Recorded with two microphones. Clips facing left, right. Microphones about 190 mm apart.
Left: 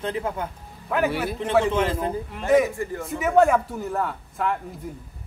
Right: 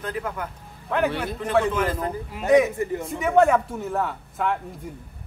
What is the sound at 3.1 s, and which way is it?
Speech, centre (ahead or behind).